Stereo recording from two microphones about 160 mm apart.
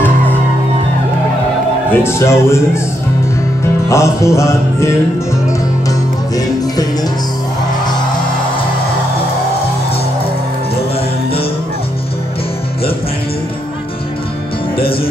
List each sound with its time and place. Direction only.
1.9 s music: 15° left (ahead or behind)